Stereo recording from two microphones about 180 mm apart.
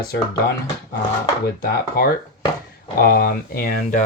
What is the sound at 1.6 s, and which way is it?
Speech, 55° left (ahead or behind).